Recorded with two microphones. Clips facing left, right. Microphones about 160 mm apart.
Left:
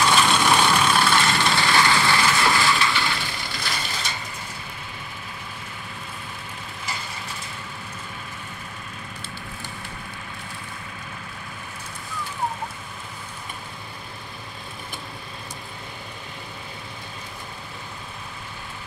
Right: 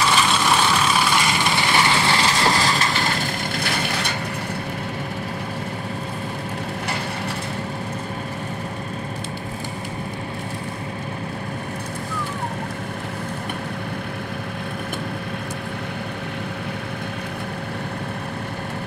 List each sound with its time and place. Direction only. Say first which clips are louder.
0.0 s vehicle: even; centre (ahead or behind); by 4.2 s 60° right (ahead or behind)